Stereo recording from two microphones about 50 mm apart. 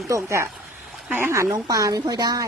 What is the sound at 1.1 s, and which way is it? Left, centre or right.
Speech, right.